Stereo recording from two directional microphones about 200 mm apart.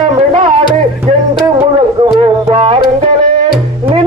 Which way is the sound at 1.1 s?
35° right (ahead or behind).